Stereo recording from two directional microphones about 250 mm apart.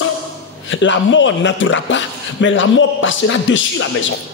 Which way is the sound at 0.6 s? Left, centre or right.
Left.